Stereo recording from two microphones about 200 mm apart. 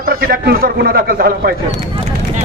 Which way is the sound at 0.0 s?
50° right (ahead or behind).